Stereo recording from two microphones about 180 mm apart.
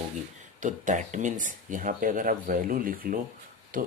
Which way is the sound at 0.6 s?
45° right (ahead or behind).